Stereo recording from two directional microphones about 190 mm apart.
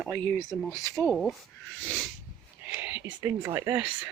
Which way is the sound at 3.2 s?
10° right (ahead or behind).